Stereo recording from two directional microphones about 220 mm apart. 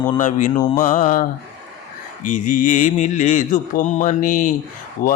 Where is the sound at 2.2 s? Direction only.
35° left (ahead or behind).